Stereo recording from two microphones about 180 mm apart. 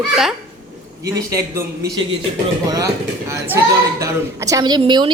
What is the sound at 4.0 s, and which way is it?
A woman's voice, 20° right (ahead or behind).